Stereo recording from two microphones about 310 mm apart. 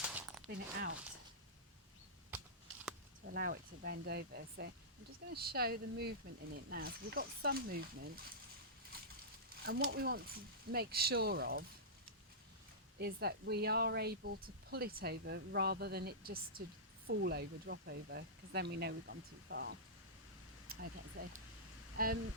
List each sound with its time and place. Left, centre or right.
0.0 s a sound: centre
0.4 s speech: right
2.3 s a sound: centre
3.2 s speech: right
9.6 s speech: right
13.0 s speech: right